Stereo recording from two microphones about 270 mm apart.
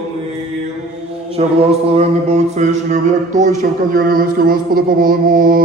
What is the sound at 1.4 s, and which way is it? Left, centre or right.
Mantra, right.